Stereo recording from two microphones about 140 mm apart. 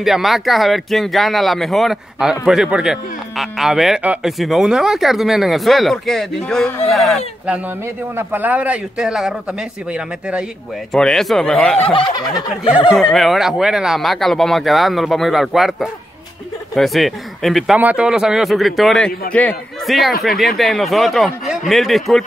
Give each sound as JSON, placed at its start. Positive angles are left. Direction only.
{"t": 0.0, "sound": "a man's voice", "side_deg": 0}
{"t": 8.2, "sound": "speech", "side_deg": -15}
{"t": 10.9, "sound": "a man's voice", "side_deg": 5}
{"t": 11.8, "sound": "speech", "side_deg": 40}
{"t": 12.6, "sound": "speech", "side_deg": 40}
{"t": 12.9, "sound": "a man's voice", "side_deg": 0}